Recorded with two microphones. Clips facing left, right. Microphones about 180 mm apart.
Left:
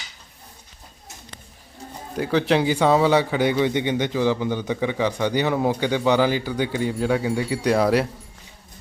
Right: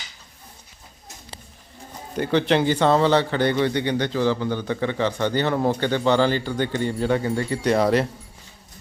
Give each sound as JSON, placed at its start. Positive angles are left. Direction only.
{"t": 2.1, "sound": "a man's voice", "side_deg": 0}